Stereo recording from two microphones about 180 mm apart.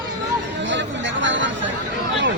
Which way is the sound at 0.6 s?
90° right.